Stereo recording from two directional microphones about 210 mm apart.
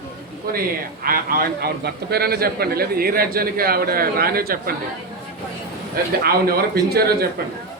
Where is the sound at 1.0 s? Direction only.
45° right (ahead or behind).